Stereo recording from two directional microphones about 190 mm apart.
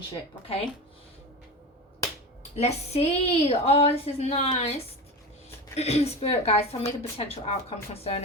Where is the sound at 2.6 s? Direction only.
35° left (ahead or behind).